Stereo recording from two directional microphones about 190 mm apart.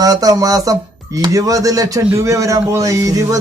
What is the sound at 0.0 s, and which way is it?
Speech, 20° right (ahead or behind).